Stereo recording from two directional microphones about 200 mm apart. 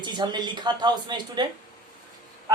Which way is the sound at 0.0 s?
20° right (ahead or behind).